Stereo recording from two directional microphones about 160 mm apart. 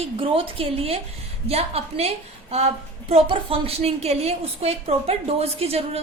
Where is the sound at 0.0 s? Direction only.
35° right (ahead or behind).